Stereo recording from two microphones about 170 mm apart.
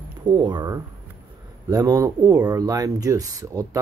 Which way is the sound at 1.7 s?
20° right (ahead or behind).